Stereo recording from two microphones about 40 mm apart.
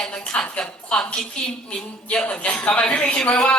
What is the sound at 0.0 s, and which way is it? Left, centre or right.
Music, left.